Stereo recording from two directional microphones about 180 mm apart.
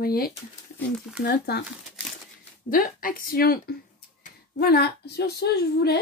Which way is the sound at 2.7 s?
50° left (ahead or behind).